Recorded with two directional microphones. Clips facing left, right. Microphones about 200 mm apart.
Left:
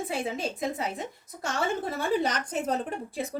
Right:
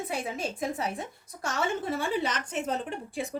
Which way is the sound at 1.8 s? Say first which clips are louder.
Left 2 dB; 40° left (ahead or behind).